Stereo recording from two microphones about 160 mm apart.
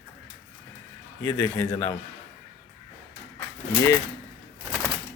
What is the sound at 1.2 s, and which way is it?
Speech, 20° left (ahead or behind).